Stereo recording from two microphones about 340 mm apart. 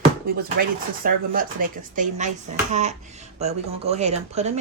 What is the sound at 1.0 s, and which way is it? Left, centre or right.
A woman's voice, right.